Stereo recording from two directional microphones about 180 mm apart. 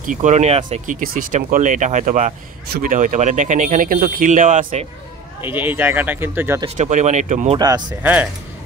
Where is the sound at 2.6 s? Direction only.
55° right (ahead or behind).